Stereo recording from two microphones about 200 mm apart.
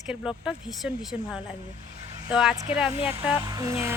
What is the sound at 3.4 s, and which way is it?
Music, 15° right (ahead or behind).